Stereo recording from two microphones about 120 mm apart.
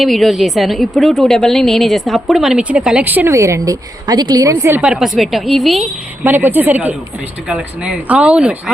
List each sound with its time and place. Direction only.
0.0 s a woman's voice: centre (ahead or behind); by 3.3 s 15° right (ahead or behind)
3.3 s a woman's voice: 25° right (ahead or behind)
4.8 s a woman's voice: 5° right (ahead or behind)
6.2 s speech: 15° right (ahead or behind)